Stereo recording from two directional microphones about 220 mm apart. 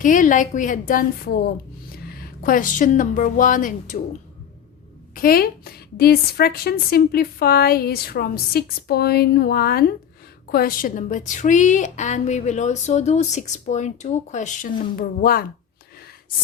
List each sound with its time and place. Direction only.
0.0 s a woman's voice: 35° left (ahead or behind)
5.1 s a woman's voice: 40° left (ahead or behind)